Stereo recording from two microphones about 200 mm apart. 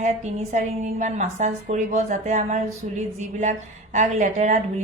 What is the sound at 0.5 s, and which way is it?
A woman's voice, 35° right (ahead or behind).